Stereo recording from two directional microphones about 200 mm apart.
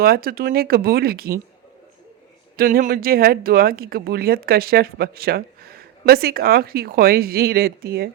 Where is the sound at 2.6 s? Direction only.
45° right (ahead or behind).